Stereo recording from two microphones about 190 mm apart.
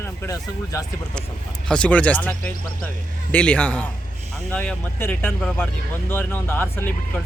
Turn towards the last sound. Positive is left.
turn(degrees=10)  # may be behind; listen again after turning